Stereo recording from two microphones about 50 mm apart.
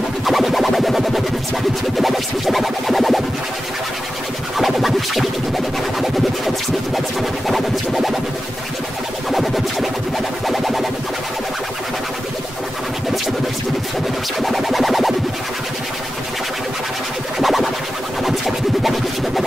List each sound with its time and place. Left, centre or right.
0.2 s music: centre
4.6 s music: centre
7.2 s music: centre
9.3 s music: centre
14.4 s music: centre
17.4 s music: centre